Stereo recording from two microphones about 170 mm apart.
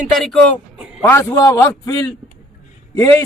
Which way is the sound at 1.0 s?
15° left (ahead or behind).